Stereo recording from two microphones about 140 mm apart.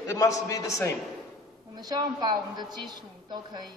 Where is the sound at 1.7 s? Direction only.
30° right (ahead or behind).